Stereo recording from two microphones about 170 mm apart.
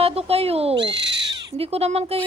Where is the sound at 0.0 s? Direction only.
35° right (ahead or behind).